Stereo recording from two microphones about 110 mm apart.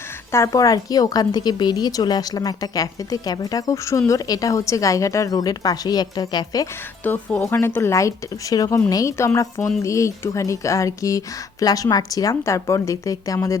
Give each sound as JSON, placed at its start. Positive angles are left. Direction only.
{"t": 0.3, "sound": "a woman's voice", "side_deg": 25}
{"t": 7.0, "sound": "a woman's voice", "side_deg": 15}